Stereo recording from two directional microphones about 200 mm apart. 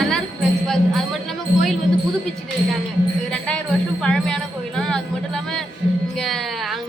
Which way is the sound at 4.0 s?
5° left (ahead or behind).